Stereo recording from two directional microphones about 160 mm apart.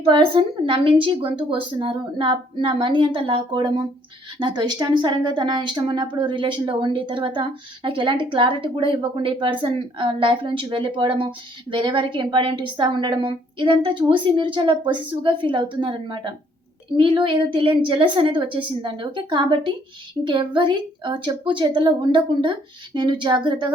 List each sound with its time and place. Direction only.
0.0 s a woman's voice: 30° right (ahead or behind)